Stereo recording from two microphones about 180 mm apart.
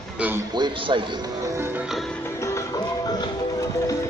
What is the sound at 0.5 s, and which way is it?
Speech, 25° right (ahead or behind).